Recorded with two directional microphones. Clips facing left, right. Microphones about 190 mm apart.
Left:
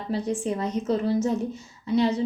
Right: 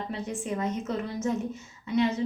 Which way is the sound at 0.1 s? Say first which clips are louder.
Left 10 dB; 35° left (ahead or behind).